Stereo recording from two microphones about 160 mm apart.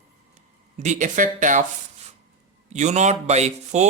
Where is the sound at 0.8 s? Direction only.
50° right (ahead or behind).